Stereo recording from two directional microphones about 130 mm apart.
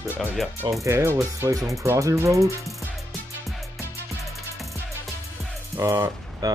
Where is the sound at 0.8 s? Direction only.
20° right (ahead or behind).